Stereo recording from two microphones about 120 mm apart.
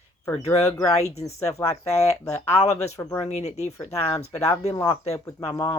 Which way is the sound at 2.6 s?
65° left (ahead or behind).